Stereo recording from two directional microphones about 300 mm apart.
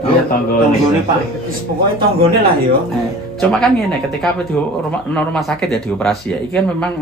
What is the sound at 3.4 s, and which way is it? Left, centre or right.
Speech, centre.